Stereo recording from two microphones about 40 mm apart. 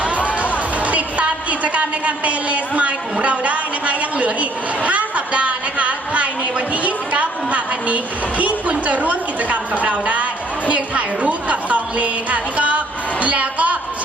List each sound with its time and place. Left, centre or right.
0.8 s a woman's voice: right